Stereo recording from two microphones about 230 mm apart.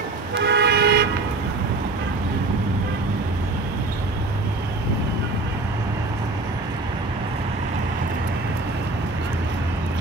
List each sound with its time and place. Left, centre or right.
0.4 s toot: right